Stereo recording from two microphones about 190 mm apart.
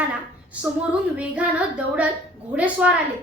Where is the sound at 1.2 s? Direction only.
5° right (ahead or behind).